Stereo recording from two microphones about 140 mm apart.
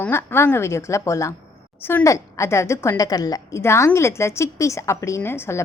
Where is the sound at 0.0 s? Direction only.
15° left (ahead or behind).